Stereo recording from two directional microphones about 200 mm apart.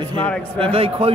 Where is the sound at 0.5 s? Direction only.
30° right (ahead or behind).